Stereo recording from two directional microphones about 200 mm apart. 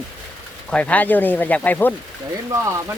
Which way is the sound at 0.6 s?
5° left (ahead or behind).